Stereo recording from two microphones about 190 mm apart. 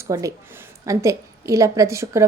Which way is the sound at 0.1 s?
15° right (ahead or behind).